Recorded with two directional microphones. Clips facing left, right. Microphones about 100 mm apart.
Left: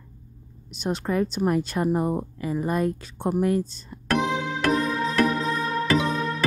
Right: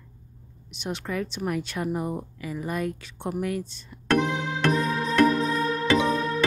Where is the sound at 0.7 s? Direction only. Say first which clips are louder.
Left 5 dB; 40° left (ahead or behind).